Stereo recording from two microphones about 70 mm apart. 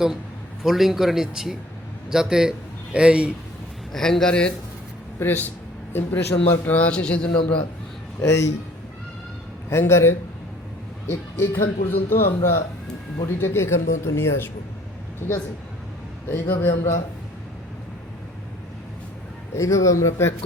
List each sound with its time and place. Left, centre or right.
0.6 s a man's voice: centre
3.9 s a man's voice: centre
5.2 s a man's voice: left
8.2 s speech: left
9.6 s speech: left
11.1 s speech: left
13.2 s speech: left
16.3 s speech: left
19.5 s speech: left